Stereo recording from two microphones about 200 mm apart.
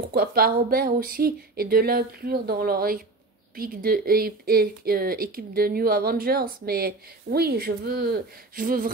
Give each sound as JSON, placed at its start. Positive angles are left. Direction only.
{"t": 0.1, "sound": "speech", "side_deg": -50}